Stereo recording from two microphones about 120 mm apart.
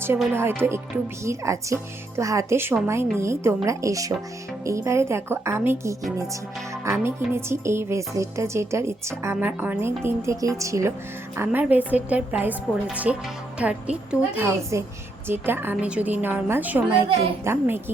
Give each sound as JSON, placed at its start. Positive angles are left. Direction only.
{"t": 0.3, "sound": "a woman's voice", "side_deg": -20}
{"t": 11.3, "sound": "a woman's voice", "side_deg": -15}
{"t": 14.3, "sound": "a woman's voice", "side_deg": -20}